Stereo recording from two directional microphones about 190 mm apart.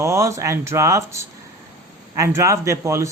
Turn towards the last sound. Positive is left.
turn(degrees=-15)  # may be behind; listen again after turning